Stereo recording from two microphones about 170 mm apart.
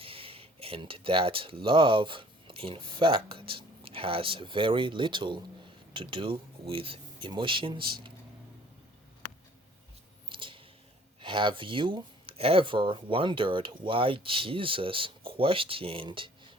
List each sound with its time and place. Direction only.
0.0 s speech: 35° right (ahead or behind)
10.2 s a sound: 30° right (ahead or behind)
11.2 s speech: 30° right (ahead or behind)